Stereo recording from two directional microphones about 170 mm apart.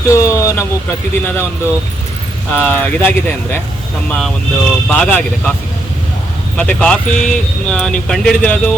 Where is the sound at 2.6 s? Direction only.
10° left (ahead or behind).